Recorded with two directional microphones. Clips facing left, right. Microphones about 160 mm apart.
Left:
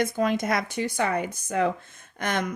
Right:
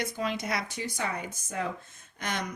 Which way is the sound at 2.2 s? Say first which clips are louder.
Left 6 dB; 55° left (ahead or behind).